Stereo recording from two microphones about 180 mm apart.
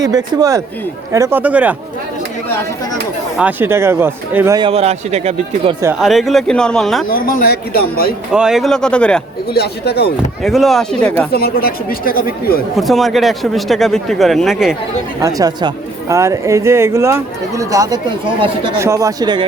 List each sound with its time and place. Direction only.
0.0 s speech: 20° right (ahead or behind)
3.3 s speech: 10° right (ahead or behind)
4.5 s speech: 30° right (ahead or behind)
6.0 s speech: centre (ahead or behind)
7.1 s speech: 50° left (ahead or behind)
8.3 s speech: 5° right (ahead or behind)
9.5 s speech: 60° left (ahead or behind)
10.4 s speech: centre (ahead or behind)
11.3 s speech: 60° left (ahead or behind)
12.7 s speech: centre (ahead or behind)
15.2 s speech: 20° right (ahead or behind)